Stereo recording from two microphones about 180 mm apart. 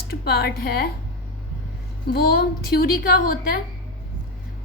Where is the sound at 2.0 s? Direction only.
60° left (ahead or behind).